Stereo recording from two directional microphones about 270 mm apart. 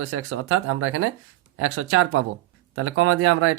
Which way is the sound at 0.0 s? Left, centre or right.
Right.